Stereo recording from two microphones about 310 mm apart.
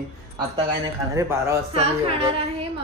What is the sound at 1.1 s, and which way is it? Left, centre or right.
A woman's voice, centre.